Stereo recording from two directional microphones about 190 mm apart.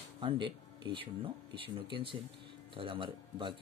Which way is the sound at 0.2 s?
25° right (ahead or behind).